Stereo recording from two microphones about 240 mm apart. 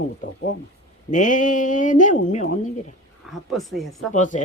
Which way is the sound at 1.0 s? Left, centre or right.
Left.